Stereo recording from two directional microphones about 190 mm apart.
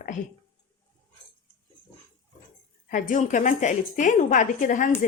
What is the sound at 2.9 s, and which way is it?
Speech, 45° left (ahead or behind).